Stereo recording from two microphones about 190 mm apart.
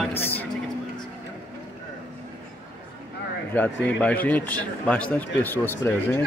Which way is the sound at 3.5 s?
10° left (ahead or behind).